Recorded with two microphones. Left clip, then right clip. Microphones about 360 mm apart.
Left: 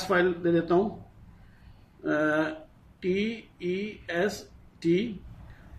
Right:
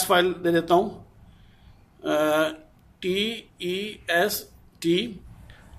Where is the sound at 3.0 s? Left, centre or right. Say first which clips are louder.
Right 3 dB; centre.